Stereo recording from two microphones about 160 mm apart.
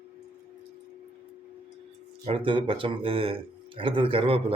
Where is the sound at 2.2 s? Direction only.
35° right (ahead or behind).